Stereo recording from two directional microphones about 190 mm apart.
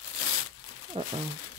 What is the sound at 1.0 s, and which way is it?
Speech, 30° right (ahead or behind).